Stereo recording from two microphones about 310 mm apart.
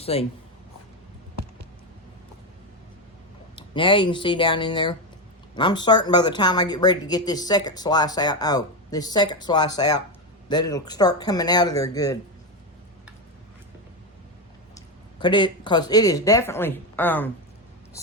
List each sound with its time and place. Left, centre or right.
0.0 s speech: centre
3.5 s speech: centre
14.8 s speech: centre